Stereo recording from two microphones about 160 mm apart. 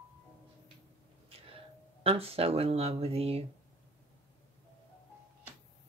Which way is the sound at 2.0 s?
35° right (ahead or behind).